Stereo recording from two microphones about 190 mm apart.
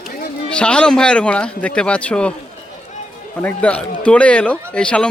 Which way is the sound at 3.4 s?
5° left (ahead or behind).